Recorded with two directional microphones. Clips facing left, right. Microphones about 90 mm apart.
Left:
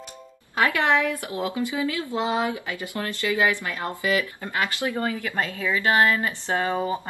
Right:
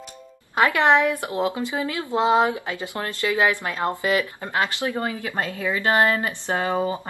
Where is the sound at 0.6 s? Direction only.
20° right (ahead or behind).